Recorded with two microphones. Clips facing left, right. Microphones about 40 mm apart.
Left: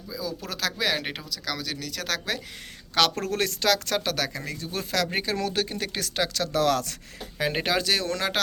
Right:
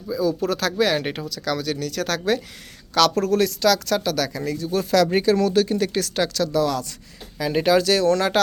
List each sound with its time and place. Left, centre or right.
0.1 s speech: centre
2.9 s speech: left
6.5 s speech: left
7.3 s speech: left
7.6 s speech: centre